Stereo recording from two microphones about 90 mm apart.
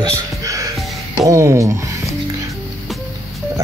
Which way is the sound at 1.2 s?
35° right (ahead or behind).